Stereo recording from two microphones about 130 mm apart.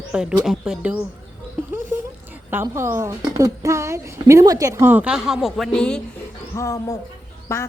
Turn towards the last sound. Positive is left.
turn(degrees=20)  # may be behind; listen again after turning